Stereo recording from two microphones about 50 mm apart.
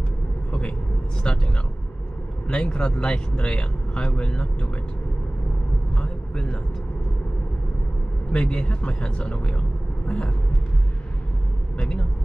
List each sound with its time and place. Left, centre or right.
0.5 s vehicle: left
1.3 s speech: centre
2.4 s speech: left
5.9 s vehicle: centre
8.3 s speech: centre